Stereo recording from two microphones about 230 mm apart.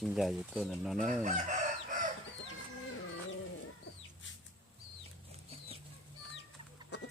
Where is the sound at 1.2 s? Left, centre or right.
Right.